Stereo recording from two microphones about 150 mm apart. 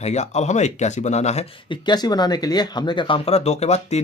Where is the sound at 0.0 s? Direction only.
50° left (ahead or behind).